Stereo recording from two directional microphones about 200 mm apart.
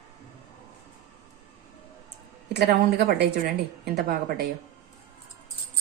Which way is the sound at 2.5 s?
55° right (ahead or behind).